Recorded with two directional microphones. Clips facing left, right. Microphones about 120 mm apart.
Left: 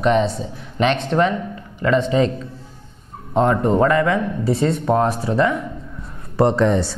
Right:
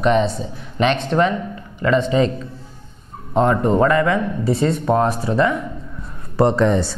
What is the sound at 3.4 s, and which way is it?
A man's voice, 10° right (ahead or behind).